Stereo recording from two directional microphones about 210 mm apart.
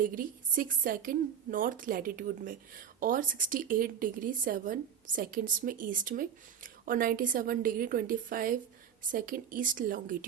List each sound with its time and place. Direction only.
0.0 s a woman's voice: 40° right (ahead or behind)